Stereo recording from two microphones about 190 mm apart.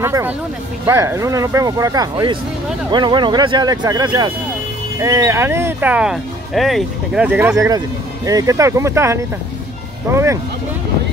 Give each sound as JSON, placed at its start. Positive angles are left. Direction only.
{"t": 0.0, "sound": "speech", "side_deg": -15}